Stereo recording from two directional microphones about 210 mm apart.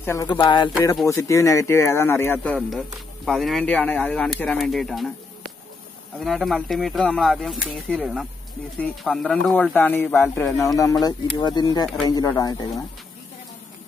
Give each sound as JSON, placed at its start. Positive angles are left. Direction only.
{"t": 0.0, "sound": "speech", "side_deg": 15}
{"t": 6.2, "sound": "speech", "side_deg": 0}